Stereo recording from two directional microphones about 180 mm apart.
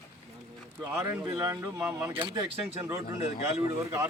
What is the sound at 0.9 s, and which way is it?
Speech, 15° right (ahead or behind).